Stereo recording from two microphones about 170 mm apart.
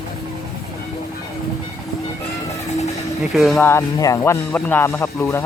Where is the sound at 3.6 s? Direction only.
15° left (ahead or behind).